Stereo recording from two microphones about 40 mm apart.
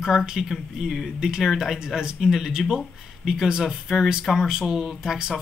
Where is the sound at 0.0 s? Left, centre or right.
Centre.